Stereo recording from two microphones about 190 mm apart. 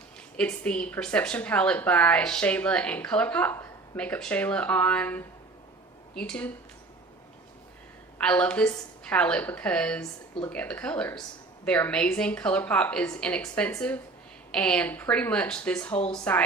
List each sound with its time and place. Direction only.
0.3 s a woman's voice: 5° left (ahead or behind)
8.2 s a woman's voice: 5° left (ahead or behind)
10.0 s a woman's voice: 15° left (ahead or behind)
10.5 s a woman's voice: 5° left (ahead or behind)